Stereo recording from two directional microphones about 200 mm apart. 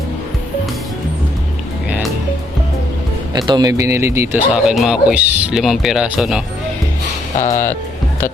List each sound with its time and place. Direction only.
3.3 s a man's voice: 20° right (ahead or behind); by 6.4 s centre (ahead or behind)
7.3 s speech: 40° left (ahead or behind)